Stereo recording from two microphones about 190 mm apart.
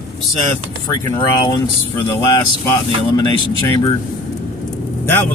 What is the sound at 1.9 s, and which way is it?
Speech, 15° left (ahead or behind).